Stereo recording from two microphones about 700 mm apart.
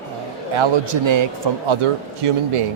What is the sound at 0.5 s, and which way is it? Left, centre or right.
A man's voice, right.